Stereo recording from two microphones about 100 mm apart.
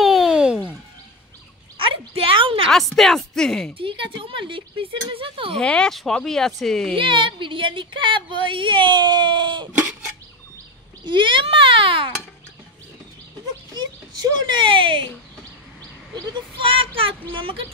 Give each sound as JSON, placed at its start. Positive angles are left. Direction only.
{"t": 0.0, "sound": "a sound", "side_deg": 0}
{"t": 1.8, "sound": "a sound", "side_deg": -65}
{"t": 2.7, "sound": "speech", "side_deg": 0}
{"t": 3.7, "sound": "a woman's voice", "side_deg": -60}
{"t": 5.6, "sound": "speech", "side_deg": 10}
{"t": 7.0, "sound": "a woman's voice", "side_deg": -55}
{"t": 11.1, "sound": "a woman's voice", "side_deg": -55}
{"t": 13.7, "sound": "speech", "side_deg": -45}
{"t": 16.6, "sound": "a woman's voice", "side_deg": -65}